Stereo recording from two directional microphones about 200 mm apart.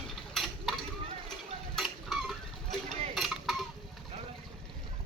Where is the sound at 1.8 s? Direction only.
Centre (ahead or behind).